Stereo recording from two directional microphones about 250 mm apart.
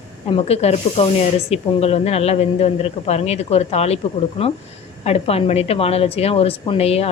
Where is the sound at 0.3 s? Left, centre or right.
Left.